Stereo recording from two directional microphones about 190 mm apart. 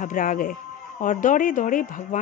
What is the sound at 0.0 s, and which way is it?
Speech, 45° left (ahead or behind).